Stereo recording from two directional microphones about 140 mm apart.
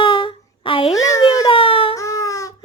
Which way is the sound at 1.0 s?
25° left (ahead or behind).